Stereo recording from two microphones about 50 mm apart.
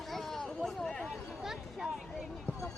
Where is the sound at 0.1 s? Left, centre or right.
Centre.